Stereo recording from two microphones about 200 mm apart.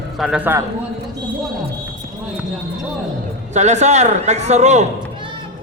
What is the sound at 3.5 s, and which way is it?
A man's voice, 35° right (ahead or behind).